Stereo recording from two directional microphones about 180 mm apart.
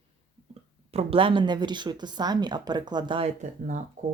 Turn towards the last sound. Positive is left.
turn(degrees=-40)  # may be behind; listen again after turning